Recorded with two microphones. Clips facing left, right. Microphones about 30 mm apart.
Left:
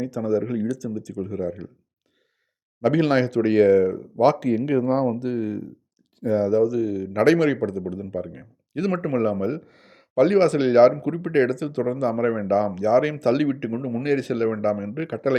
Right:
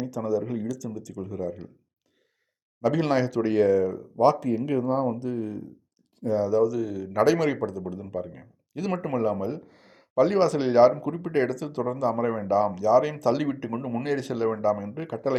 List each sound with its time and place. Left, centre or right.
0.0 s speech: left
2.8 s speech: left
3.4 s speech: left
4.2 s speech: left
6.2 s speech: left
6.6 s a man's voice: centre
7.2 s a man's voice: left
14.5 s speech: left